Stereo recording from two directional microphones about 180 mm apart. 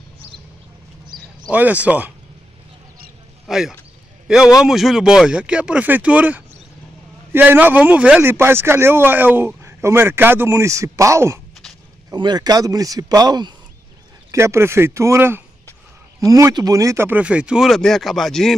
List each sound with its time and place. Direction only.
1.0 s a sound: 25° right (ahead or behind)
1.5 s speech: 10° right (ahead or behind)
3.4 s speech: 5° right (ahead or behind)